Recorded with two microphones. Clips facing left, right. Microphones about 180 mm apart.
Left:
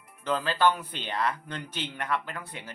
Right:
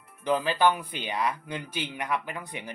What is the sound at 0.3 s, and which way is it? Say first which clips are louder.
Speech: right 2 dB; 15° right (ahead or behind).